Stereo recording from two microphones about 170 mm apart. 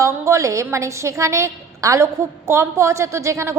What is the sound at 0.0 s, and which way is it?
A woman's voice, 15° right (ahead or behind).